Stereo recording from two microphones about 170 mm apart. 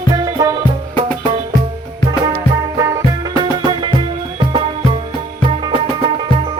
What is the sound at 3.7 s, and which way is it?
Music, 30° right (ahead or behind).